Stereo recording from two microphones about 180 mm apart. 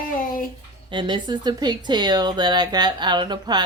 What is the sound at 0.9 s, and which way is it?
Speech, 25° right (ahead or behind).